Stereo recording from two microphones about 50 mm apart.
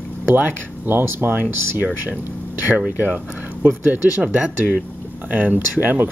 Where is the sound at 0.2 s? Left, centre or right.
Right.